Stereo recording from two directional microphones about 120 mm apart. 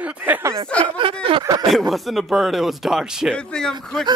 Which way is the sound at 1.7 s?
Centre (ahead or behind).